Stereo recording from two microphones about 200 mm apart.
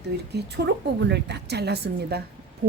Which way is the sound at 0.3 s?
55° right (ahead or behind).